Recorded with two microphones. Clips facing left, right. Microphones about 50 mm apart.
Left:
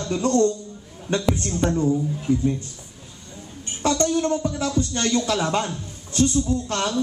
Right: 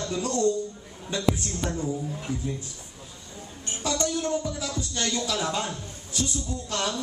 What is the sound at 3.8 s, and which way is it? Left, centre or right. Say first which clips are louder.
A man's voice: left 7 dB; left.